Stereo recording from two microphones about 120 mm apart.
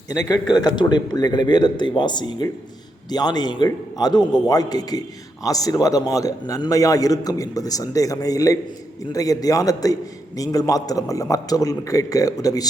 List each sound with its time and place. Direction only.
0.1 s a man's voice: 35° left (ahead or behind)